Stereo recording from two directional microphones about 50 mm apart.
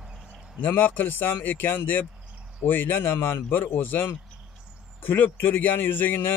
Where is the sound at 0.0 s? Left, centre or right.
Centre.